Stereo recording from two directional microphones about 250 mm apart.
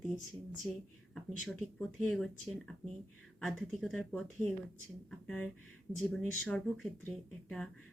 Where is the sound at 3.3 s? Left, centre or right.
Centre.